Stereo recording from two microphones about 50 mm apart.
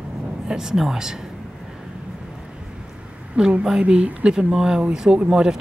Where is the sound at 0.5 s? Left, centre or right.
Centre.